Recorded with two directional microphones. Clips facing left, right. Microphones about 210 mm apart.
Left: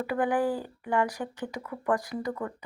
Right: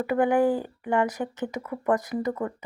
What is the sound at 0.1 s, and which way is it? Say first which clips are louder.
Speech: right 6 dB; 20° right (ahead or behind).